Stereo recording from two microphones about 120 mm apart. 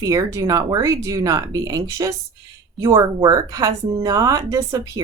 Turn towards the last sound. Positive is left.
turn(degrees=-30)  # may be behind; listen again after turning